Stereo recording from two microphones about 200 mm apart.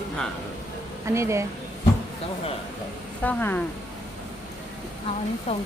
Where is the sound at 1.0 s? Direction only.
15° right (ahead or behind).